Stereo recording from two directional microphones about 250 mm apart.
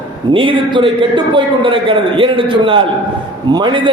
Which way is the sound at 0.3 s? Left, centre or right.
Centre.